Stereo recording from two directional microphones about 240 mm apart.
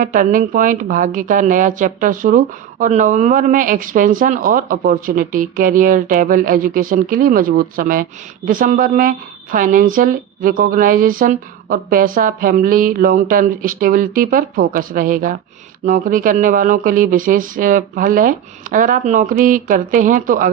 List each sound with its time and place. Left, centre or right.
0.0 s a woman's voice: right